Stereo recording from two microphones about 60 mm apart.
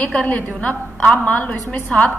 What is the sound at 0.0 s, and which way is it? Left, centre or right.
A woman's voice, centre.